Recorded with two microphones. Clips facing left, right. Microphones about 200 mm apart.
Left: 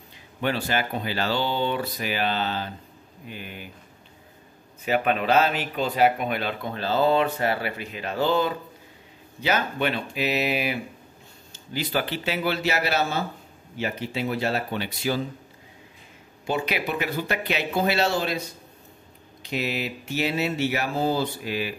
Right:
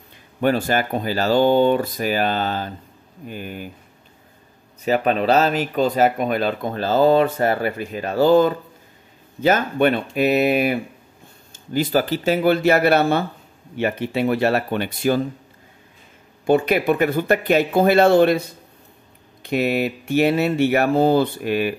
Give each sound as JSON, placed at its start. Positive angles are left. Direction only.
{"t": 0.4, "sound": "speech", "side_deg": -45}
{"t": 4.8, "sound": "speech", "side_deg": -40}
{"t": 16.4, "sound": "speech", "side_deg": -50}
{"t": 19.4, "sound": "speech", "side_deg": -55}